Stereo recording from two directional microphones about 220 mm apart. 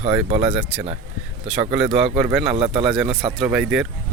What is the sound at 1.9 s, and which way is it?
Speech, centre (ahead or behind).